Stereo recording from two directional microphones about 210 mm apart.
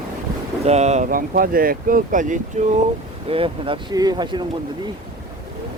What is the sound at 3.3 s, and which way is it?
Speech, 25° right (ahead or behind).